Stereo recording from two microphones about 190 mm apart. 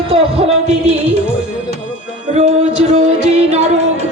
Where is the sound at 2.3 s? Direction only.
35° right (ahead or behind).